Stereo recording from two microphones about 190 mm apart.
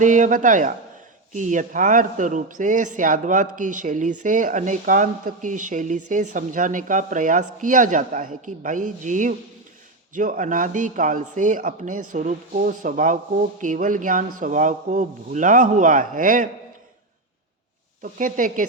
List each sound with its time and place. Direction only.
0.0 s speech: 40° right (ahead or behind)
18.0 s speech: 45° right (ahead or behind)